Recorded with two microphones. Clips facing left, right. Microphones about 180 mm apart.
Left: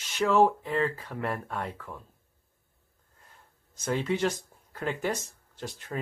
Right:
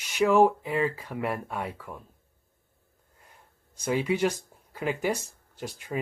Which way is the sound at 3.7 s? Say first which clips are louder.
Right 2 dB; 10° right (ahead or behind).